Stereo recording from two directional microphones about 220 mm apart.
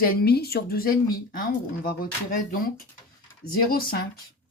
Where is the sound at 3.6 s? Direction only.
40° left (ahead or behind).